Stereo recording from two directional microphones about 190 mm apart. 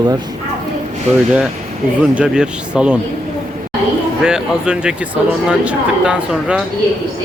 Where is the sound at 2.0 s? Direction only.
5° right (ahead or behind).